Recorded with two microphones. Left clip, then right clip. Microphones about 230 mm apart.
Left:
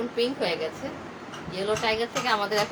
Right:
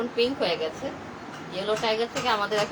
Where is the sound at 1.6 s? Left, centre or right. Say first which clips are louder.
Even; left.